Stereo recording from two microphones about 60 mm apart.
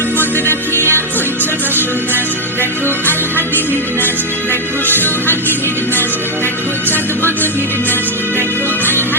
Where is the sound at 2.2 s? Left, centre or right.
Left.